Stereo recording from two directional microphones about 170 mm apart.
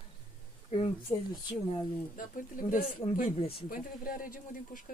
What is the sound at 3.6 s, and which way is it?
Speech, 55° left (ahead or behind).